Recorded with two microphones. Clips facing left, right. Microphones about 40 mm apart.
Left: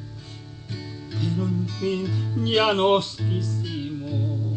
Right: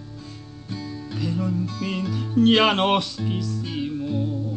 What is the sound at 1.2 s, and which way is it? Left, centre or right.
Music, right.